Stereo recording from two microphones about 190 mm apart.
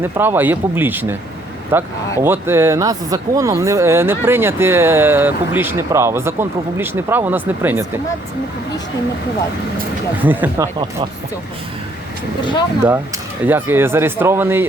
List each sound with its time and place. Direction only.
0.0 s speech: 10° right (ahead or behind)
10.2 s speech: 10° right (ahead or behind)
13.4 s speech: 10° right (ahead or behind)